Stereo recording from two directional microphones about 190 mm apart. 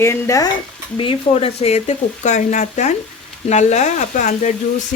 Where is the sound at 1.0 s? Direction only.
30° left (ahead or behind).